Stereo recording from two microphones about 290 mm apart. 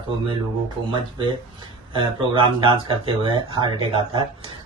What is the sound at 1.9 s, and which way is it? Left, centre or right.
Speech, centre.